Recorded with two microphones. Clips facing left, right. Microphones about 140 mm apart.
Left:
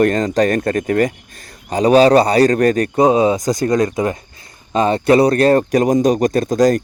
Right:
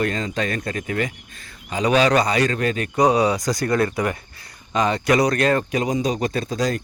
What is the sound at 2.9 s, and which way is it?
Speech, 25° left (ahead or behind).